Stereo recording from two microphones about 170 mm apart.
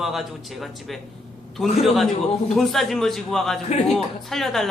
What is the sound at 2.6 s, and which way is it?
Speech, centre (ahead or behind).